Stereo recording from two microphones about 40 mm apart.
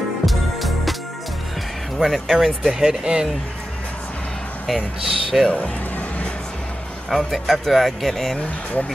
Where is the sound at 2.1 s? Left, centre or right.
Centre.